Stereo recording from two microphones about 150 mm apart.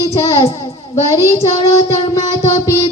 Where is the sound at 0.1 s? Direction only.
20° left (ahead or behind).